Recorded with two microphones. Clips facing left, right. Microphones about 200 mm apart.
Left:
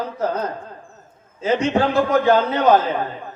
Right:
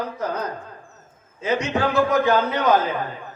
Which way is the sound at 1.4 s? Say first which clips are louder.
Left 4 dB; 30° left (ahead or behind).